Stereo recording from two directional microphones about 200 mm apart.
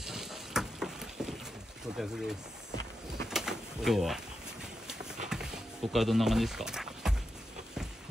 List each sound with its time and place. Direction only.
0.0 s vehicle: centre (ahead or behind)
2.0 s speech: centre (ahead or behind)
3.3 s bird: centre (ahead or behind)
5.3 s a sound: 5° right (ahead or behind)